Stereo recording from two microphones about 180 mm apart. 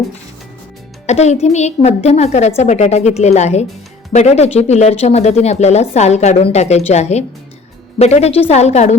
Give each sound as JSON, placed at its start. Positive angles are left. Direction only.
{"t": 1.0, "sound": "speech", "side_deg": 40}